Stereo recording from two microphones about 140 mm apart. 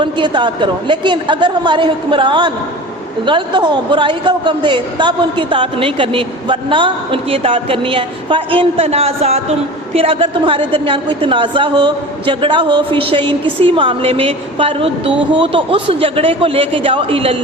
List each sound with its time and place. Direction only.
0.0 s a woman's voice: 35° right (ahead or behind)